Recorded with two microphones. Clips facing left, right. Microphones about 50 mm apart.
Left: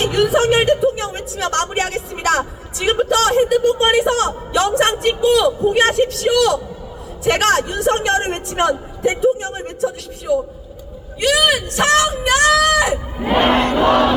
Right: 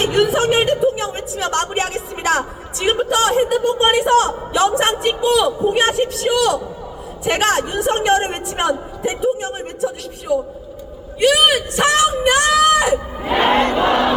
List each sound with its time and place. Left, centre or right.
0.0 s a sound: centre
2.7 s a man's voice: centre
13.6 s crowd: right